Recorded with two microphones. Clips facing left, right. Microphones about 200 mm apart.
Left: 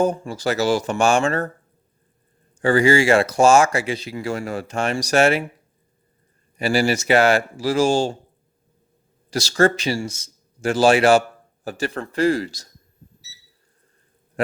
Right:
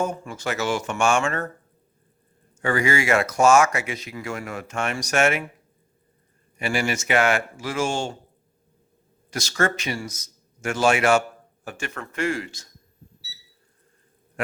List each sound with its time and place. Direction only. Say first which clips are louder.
0.0 s speech: left 6 dB; 35° left (ahead or behind)
2.6 s speech: left 7 dB; 30° left (ahead or behind)
6.6 s speech: left 6 dB; 35° left (ahead or behind)
9.3 s a man's voice: left 7 dB; 35° left (ahead or behind)
14.4 s a sound: left 6 dB; 35° left (ahead or behind)